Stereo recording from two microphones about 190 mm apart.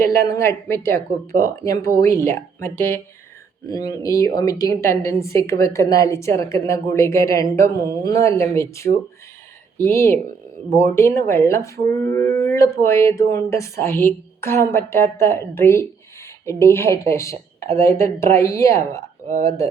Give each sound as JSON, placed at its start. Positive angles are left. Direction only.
{"t": 0.0, "sound": "a woman's voice", "side_deg": 15}